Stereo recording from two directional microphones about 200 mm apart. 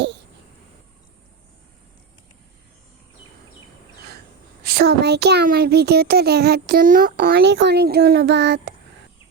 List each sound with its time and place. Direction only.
4.6 s a child's voice: 50° right (ahead or behind)